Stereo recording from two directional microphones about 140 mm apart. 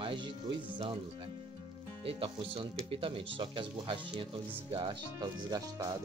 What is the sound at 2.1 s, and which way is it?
Speech, 40° right (ahead or behind).